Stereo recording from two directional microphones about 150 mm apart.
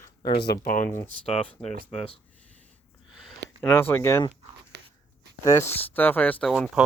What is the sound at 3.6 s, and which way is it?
Speech, 15° left (ahead or behind).